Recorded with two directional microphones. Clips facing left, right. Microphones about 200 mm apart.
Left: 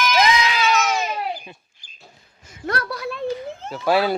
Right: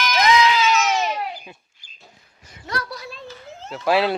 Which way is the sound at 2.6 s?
55° left (ahead or behind).